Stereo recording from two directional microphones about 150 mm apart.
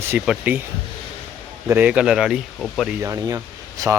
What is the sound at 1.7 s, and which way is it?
Speech, 10° right (ahead or behind).